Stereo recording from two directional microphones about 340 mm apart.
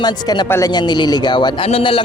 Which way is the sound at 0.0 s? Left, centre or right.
Centre.